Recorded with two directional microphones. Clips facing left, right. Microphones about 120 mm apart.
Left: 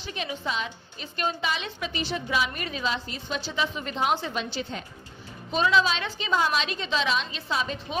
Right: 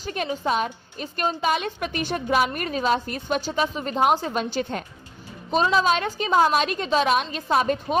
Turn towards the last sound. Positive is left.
turn(degrees=-50)  # may be behind; listen again after turning